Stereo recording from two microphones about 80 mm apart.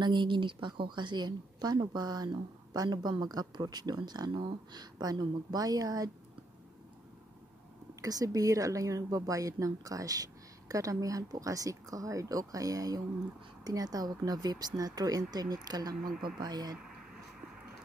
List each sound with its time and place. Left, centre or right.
0.0 s a woman's voice: right
8.0 s a woman's voice: right